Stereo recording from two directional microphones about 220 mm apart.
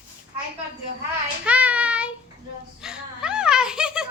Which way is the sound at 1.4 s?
5° right (ahead or behind).